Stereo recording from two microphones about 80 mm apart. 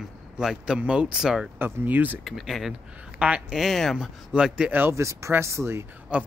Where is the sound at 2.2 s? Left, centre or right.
Centre.